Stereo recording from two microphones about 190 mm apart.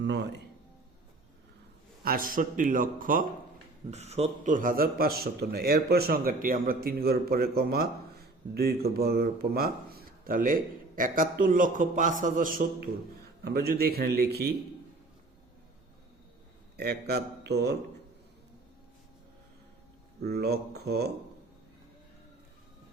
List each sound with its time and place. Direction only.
0.0 s a man's voice: 65° right (ahead or behind)
2.0 s a man's voice: 50° right (ahead or behind)
3.9 s a man's voice: 35° right (ahead or behind); by 14.5 s 55° right (ahead or behind)
16.7 s a man's voice: 55° right (ahead or behind)
20.2 s a man's voice: 55° right (ahead or behind)